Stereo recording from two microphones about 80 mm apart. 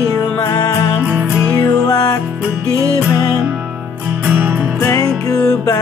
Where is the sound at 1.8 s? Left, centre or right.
Left.